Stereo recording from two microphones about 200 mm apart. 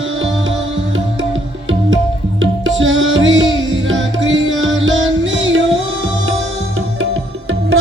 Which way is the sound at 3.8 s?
70° right (ahead or behind).